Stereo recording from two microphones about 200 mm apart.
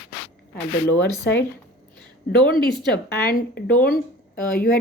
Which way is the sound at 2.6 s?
25° right (ahead or behind).